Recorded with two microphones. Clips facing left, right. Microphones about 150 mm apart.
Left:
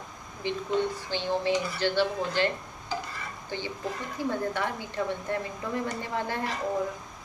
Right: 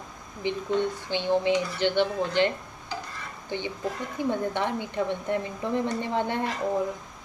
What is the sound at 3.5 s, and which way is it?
A woman's voice, 20° right (ahead or behind).